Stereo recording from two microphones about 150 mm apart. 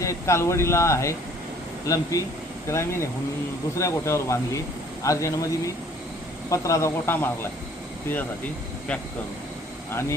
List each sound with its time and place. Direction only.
0.0 s speech: 20° left (ahead or behind)